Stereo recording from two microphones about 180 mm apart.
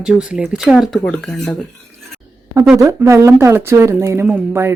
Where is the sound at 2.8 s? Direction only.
15° right (ahead or behind).